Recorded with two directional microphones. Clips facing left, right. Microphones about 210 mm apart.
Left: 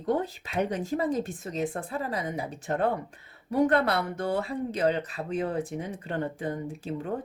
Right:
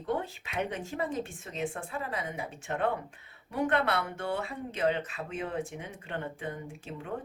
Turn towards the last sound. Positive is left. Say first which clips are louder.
# left 7 dB
turn(degrees=40)  # may be behind; listen again after turning